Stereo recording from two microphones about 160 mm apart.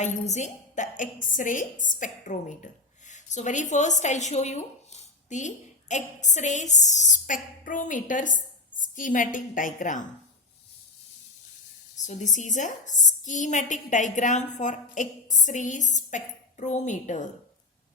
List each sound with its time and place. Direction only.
0.0 s a woman's voice: 45° left (ahead or behind)
11.9 s a woman's voice: 50° left (ahead or behind)